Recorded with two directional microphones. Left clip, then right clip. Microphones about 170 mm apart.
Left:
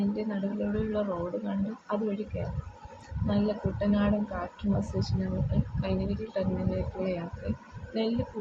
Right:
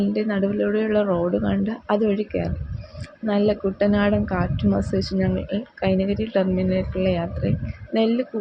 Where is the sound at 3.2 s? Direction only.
50° right (ahead or behind).